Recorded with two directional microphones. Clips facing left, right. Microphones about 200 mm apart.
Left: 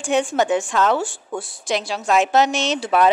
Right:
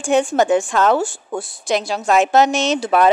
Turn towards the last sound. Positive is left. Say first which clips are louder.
# right 3 dB
turn(degrees=-45)  # may be behind; listen again after turning